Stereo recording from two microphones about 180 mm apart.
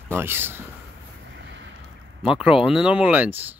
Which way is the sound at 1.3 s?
80° right.